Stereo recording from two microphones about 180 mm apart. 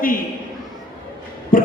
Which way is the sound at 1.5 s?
50° left (ahead or behind).